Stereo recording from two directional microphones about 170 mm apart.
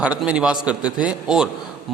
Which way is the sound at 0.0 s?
5° right (ahead or behind).